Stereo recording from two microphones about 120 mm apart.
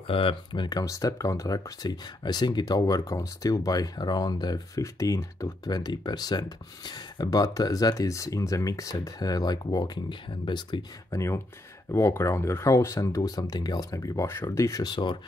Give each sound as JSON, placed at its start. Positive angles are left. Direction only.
{"t": 0.0, "sound": "speech", "side_deg": 50}
{"t": 11.1, "sound": "speech", "side_deg": 25}